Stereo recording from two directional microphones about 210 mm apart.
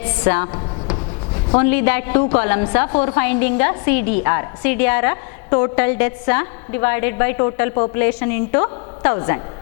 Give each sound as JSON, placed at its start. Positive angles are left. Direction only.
{"t": 0.2, "sound": "a woman's voice", "side_deg": 15}